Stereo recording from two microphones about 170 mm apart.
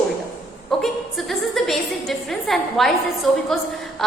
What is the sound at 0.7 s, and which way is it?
A woman's voice, centre (ahead or behind).